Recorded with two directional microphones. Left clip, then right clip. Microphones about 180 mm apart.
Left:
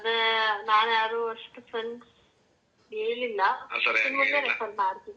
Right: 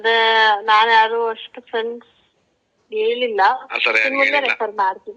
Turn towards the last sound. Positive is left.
turn(degrees=-40)  # may be behind; listen again after turning